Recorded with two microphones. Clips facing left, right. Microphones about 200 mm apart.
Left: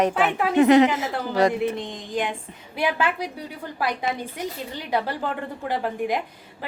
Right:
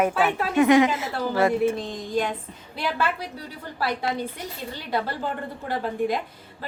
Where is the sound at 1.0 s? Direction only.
40° left (ahead or behind).